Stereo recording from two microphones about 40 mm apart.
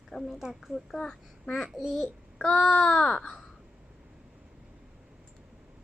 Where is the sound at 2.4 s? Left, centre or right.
Left.